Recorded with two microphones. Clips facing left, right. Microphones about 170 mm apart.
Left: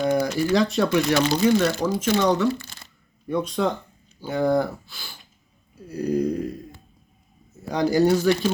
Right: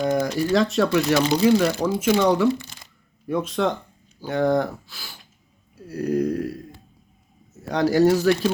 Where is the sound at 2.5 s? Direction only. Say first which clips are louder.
Right 3 dB; 20° right (ahead or behind).